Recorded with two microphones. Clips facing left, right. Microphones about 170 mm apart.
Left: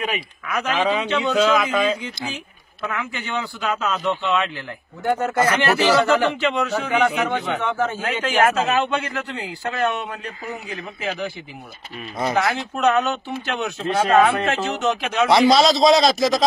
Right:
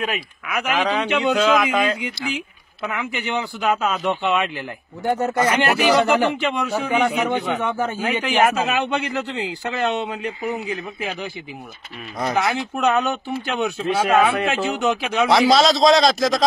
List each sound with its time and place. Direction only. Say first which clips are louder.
0.0 s speech: right 1 dB; 5° right (ahead or behind)
0.7 s a man's voice: even; 5° left (ahead or behind)
2.3 s speech: right 6 dB; 15° right (ahead or behind)
12.2 s a man's voice: left 1 dB; centre (ahead or behind)
12.4 s speech: even; 20° right (ahead or behind)
15.2 s a man's voice: left 1 dB; centre (ahead or behind)